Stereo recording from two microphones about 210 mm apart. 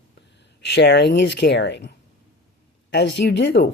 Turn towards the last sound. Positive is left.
turn(degrees=55)  # may be behind; listen again after turning